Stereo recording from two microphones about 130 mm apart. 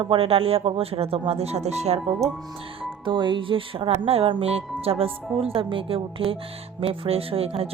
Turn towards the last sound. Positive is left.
turn(degrees=-50)  # may be behind; listen again after turning